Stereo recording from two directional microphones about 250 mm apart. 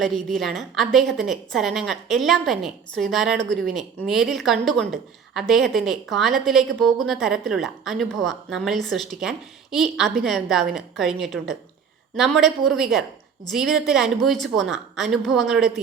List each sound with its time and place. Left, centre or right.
0.0 s a woman's voice: centre